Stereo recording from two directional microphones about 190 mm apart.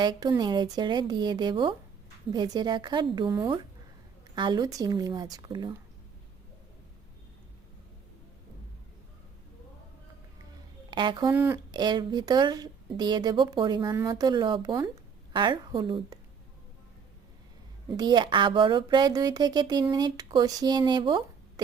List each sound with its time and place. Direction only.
0.0 s speech: 20° right (ahead or behind)
10.9 s speech: 25° right (ahead or behind)
17.9 s speech: 20° right (ahead or behind)